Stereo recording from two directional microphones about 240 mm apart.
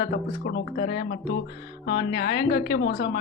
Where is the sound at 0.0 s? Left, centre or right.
Left.